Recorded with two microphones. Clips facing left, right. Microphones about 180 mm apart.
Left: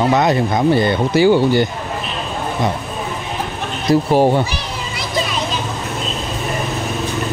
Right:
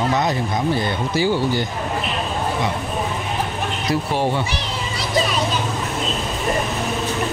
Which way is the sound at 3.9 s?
40° left (ahead or behind).